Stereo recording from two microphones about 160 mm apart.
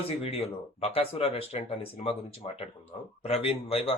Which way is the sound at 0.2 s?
40° left (ahead or behind).